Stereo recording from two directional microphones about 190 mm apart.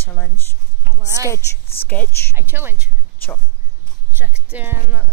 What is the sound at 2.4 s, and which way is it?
Speech, 10° right (ahead or behind).